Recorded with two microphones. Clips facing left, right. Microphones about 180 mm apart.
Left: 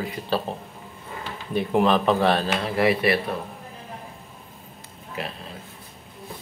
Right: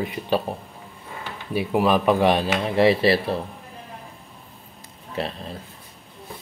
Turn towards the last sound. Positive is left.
turn(degrees=-30)  # may be behind; listen again after turning